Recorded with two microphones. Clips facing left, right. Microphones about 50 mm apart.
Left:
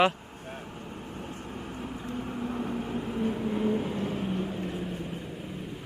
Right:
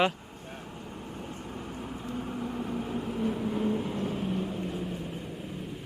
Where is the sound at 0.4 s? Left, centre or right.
Centre.